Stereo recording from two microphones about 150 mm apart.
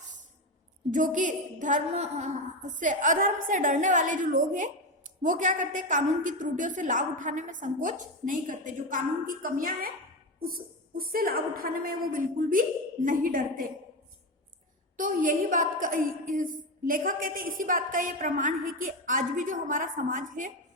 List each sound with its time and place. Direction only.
0.9 s a woman's voice: 60° right (ahead or behind)
14.9 s a woman's voice: 65° right (ahead or behind)